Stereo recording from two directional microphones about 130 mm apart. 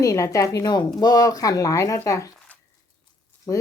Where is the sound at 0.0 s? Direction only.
25° left (ahead or behind).